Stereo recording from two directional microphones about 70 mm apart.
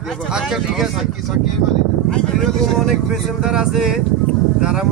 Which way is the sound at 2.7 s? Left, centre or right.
Centre.